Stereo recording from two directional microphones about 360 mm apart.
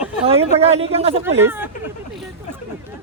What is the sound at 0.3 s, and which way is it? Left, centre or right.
Speech, centre.